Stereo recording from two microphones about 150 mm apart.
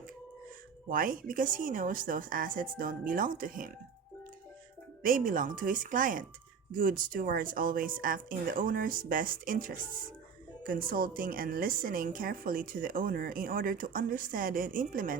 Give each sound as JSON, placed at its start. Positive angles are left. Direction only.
{"t": 0.9, "sound": "a woman's voice", "side_deg": -65}
{"t": 5.0, "sound": "a woman's voice", "side_deg": -65}